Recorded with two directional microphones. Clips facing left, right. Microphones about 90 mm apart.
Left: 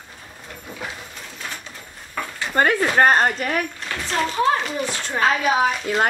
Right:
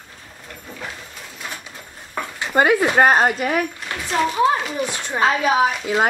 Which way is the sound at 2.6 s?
10° right (ahead or behind).